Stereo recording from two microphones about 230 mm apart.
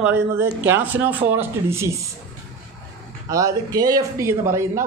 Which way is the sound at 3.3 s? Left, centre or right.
Centre.